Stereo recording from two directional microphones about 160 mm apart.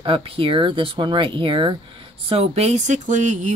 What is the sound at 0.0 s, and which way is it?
Speech, 35° right (ahead or behind).